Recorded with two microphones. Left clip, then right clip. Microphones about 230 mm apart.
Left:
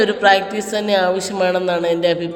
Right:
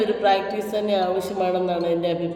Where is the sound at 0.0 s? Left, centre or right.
Centre.